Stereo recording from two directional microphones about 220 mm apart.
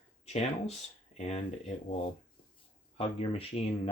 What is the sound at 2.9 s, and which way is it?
Speech, 25° left (ahead or behind).